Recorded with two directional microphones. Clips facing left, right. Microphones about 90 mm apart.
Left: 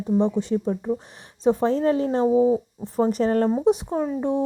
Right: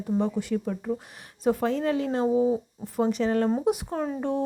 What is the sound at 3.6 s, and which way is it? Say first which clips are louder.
Speech: left 5 dB; 25° left (ahead or behind).